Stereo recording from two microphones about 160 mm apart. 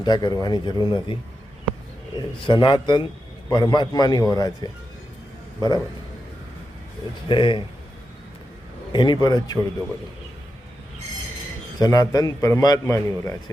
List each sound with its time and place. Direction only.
0.0 s a man's voice: 25° left (ahead or behind)
7.3 s a man's voice: 30° left (ahead or behind)
8.9 s a man's voice: 30° left (ahead or behind)
11.8 s a man's voice: 25° left (ahead or behind)